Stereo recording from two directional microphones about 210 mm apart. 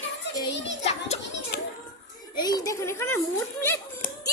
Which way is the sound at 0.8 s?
30° left (ahead or behind).